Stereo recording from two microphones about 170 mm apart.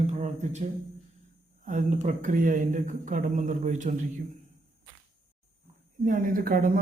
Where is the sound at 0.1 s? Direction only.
45° right (ahead or behind).